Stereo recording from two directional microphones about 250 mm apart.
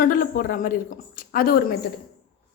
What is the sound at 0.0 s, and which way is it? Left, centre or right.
Speech, left.